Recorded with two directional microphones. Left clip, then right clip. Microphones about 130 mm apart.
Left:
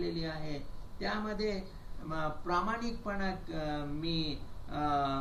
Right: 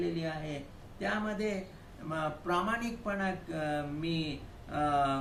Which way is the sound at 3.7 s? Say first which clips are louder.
Right 2 dB; 30° right (ahead or behind).